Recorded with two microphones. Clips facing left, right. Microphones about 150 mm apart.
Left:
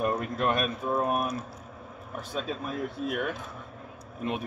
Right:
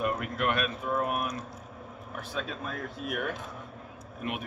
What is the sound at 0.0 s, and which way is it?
Speech, 35° left (ahead or behind).